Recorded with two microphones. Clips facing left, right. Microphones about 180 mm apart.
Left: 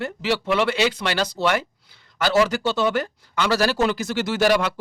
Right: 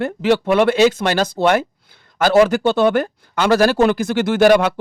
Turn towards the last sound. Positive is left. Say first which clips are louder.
# right 7 dB
turn(degrees=-55)  # may be behind; listen again after turning